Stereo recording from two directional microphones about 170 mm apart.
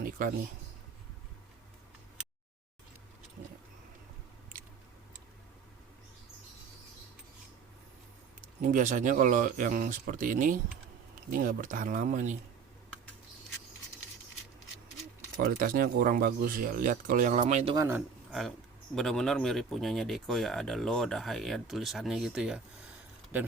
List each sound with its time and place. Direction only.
8.6 s speech: 50° right (ahead or behind)
15.4 s speech: 60° right (ahead or behind); by 17.7 s 40° right (ahead or behind)
17.7 s speech: 15° right (ahead or behind)
18.3 s speech: centre (ahead or behind)